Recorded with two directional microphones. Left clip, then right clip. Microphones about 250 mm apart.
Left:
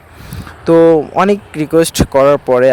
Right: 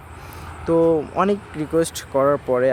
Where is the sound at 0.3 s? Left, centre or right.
Left.